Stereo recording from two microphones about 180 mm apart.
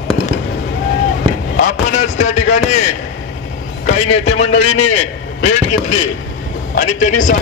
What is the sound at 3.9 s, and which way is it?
A man's voice, 40° left (ahead or behind).